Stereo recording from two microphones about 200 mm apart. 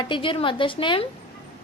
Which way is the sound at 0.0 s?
25° left (ahead or behind).